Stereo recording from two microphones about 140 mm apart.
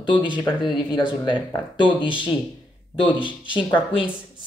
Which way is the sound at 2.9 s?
35° left (ahead or behind).